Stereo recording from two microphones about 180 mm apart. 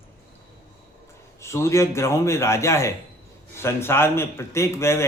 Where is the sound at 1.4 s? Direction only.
15° left (ahead or behind).